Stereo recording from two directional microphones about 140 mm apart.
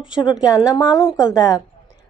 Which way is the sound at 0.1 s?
30° left (ahead or behind).